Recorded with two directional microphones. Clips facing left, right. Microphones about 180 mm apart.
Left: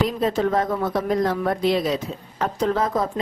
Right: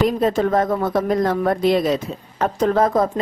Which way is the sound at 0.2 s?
50° right (ahead or behind).